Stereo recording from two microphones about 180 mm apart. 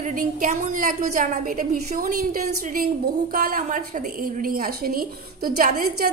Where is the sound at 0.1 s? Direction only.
50° right (ahead or behind).